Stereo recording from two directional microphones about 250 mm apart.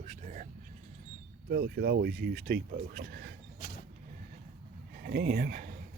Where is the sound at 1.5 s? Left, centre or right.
Right.